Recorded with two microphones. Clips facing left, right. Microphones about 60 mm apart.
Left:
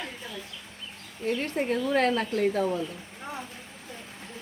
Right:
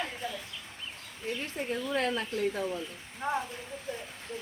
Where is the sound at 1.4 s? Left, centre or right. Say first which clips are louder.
Left 6 dB; left.